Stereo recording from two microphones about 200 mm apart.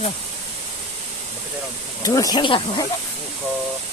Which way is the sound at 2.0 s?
15° left (ahead or behind).